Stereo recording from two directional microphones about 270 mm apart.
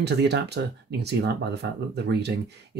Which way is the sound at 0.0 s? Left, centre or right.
Right.